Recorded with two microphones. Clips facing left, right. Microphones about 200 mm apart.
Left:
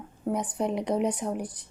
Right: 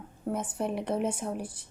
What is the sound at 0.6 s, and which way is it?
Speech, 15° left (ahead or behind).